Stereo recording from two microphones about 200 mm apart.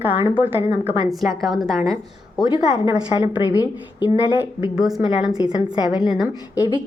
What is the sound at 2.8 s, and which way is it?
Speech, 15° right (ahead or behind).